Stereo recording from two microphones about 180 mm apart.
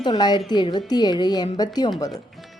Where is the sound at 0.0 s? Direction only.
25° left (ahead or behind).